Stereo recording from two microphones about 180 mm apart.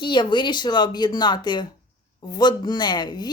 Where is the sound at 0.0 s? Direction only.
25° left (ahead or behind).